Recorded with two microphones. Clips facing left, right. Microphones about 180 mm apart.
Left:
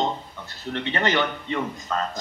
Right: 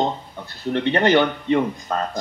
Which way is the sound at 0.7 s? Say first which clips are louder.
Right 7 dB; 45° right (ahead or behind).